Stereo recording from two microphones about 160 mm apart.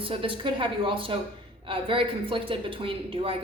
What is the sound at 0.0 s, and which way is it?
Speech, 35° right (ahead or behind).